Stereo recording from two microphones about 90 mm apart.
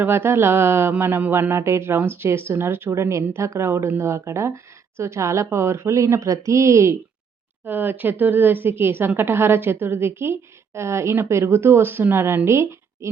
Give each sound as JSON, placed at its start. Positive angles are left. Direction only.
{"t": 0.0, "sound": "speech", "side_deg": -25}
{"t": 7.6, "sound": "speech", "side_deg": -20}